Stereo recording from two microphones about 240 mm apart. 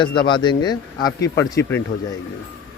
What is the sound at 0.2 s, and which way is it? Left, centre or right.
A man's voice, centre.